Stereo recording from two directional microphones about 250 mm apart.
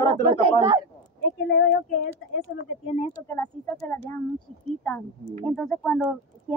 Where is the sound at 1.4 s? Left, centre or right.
Left.